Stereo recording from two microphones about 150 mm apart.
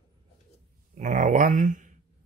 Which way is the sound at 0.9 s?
55° right (ahead or behind).